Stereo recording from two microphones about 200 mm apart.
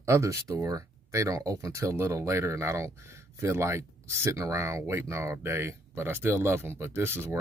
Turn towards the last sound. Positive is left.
turn(degrees=-10)  # may be behind; listen again after turning